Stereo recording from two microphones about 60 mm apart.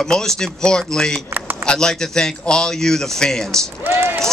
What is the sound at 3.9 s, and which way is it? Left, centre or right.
Speech, right.